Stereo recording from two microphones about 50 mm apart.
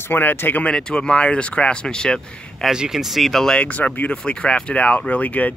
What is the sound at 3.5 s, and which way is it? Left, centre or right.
Speech, left.